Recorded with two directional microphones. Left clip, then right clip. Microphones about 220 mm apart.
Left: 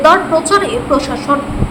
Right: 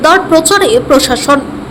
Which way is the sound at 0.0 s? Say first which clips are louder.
Right 2 dB; 25° right (ahead or behind).